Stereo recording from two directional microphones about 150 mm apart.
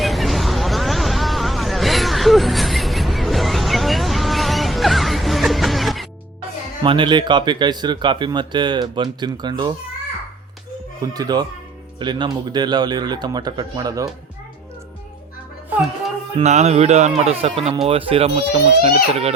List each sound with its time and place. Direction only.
0.0 s a sound: centre (ahead or behind)
6.8 s speech: 35° right (ahead or behind)
11.0 s speech: 25° right (ahead or behind)
16.4 s speech: 50° right (ahead or behind)